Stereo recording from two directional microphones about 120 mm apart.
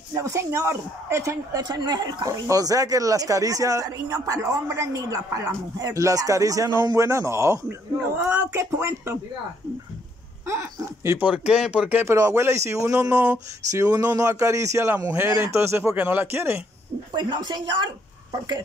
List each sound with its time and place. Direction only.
0.1 s speech: 25° right (ahead or behind)
10.4 s speech: 25° right (ahead or behind)
11.2 s speech: 10° right (ahead or behind)
12.0 s speech: 25° right (ahead or behind)
13.7 s speech: 25° right (ahead or behind)
17.1 s speech: 40° right (ahead or behind)